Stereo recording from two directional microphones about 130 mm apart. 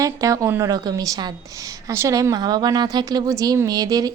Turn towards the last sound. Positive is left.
turn(degrees=-30)  # may be behind; listen again after turning